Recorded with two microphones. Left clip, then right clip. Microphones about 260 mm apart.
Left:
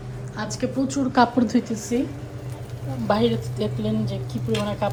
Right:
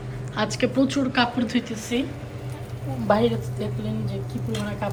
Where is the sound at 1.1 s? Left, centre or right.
Centre.